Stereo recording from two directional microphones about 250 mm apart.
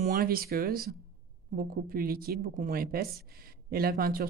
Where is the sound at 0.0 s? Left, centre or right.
Right.